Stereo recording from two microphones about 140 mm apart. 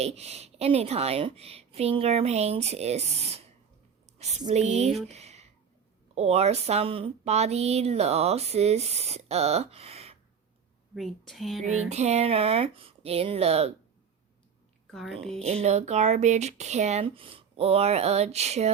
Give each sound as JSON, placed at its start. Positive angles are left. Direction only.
{"t": 0.0, "sound": "speech", "side_deg": -50}
{"t": 5.0, "sound": "a sound", "side_deg": -50}
{"t": 6.1, "sound": "speech", "side_deg": -50}
{"t": 10.9, "sound": "a woman's voice", "side_deg": 0}
{"t": 11.9, "sound": "speech", "side_deg": -50}
{"t": 14.8, "sound": "speech", "side_deg": 0}
{"t": 15.4, "sound": "speech", "side_deg": -50}